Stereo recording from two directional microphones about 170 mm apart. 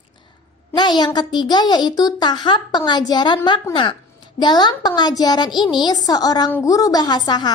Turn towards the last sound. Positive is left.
turn(degrees=25)  # may be behind; listen again after turning